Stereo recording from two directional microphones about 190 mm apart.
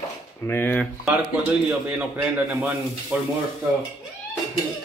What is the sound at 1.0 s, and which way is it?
A man's voice, 5° right (ahead or behind).